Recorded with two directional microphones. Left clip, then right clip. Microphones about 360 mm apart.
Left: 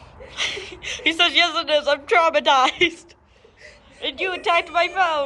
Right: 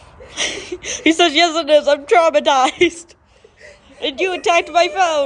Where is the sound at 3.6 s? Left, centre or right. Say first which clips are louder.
Right 4 dB; right.